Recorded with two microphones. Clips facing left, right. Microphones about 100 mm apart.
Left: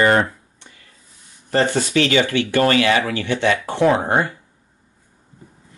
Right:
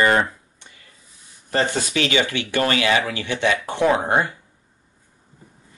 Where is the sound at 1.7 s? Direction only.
15° right (ahead or behind).